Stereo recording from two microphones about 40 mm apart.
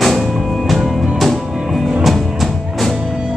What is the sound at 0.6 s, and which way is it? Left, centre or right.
Music, centre.